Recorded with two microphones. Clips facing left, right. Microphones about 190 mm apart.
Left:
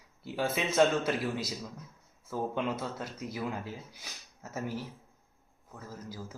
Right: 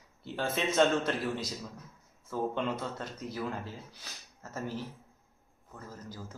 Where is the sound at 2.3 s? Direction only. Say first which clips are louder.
Even; 5° left (ahead or behind).